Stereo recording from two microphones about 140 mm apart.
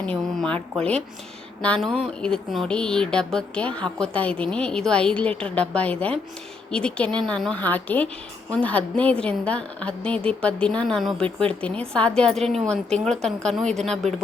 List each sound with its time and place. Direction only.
0.0 s a woman's voice: 5° left (ahead or behind)
1.6 s a woman's voice: 5° left (ahead or behind)